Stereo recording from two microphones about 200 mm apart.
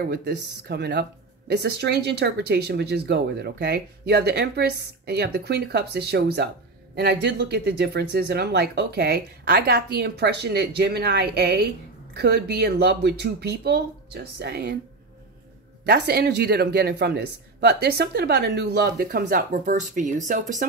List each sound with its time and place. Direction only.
0.0 s speech: 55° right (ahead or behind)
15.8 s speech: 55° right (ahead or behind)